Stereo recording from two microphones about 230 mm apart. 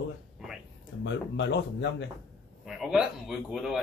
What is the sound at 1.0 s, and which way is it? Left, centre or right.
Speech, left.